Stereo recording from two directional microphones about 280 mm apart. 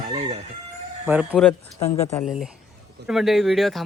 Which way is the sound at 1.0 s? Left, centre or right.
Centre.